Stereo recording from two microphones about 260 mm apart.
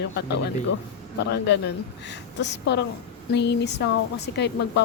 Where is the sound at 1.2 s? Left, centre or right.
Left.